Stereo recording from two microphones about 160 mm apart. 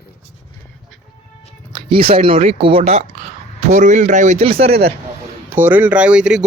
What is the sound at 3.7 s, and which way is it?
Speech, 50° right (ahead or behind).